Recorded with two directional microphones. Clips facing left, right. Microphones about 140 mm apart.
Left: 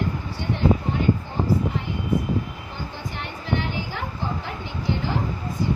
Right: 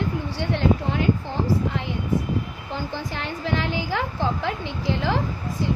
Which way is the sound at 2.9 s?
90° right.